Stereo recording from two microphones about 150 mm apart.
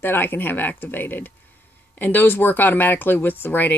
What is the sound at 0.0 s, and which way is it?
Speech, 15° left (ahead or behind).